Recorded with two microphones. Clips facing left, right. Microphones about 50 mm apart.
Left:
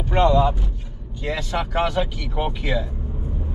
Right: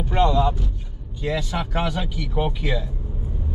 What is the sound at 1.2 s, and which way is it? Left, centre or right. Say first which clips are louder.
Speech: even; centre.